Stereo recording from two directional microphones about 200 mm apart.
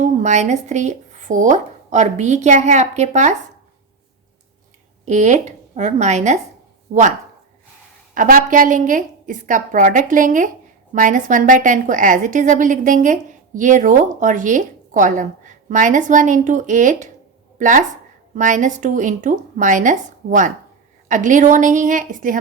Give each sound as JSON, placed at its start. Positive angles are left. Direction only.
{"t": 0.0, "sound": "speech", "side_deg": -35}
{"t": 5.0, "sound": "a woman's voice", "side_deg": -35}
{"t": 8.1, "sound": "a woman's voice", "side_deg": -40}